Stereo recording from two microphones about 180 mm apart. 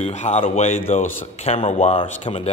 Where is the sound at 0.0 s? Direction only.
40° left (ahead or behind).